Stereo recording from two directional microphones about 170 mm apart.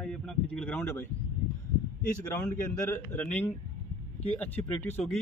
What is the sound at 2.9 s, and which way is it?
Speech, 15° left (ahead or behind).